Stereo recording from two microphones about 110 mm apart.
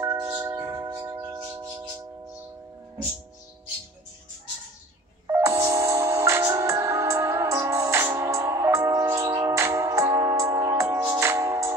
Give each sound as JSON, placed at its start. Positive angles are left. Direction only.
{"t": 0.0, "sound": "tubular bells", "side_deg": -25}
{"t": 0.8, "sound": "singing bowl", "side_deg": -30}
{"t": 1.2, "sound": "a sound", "side_deg": -30}
{"t": 5.2, "sound": "music", "side_deg": -25}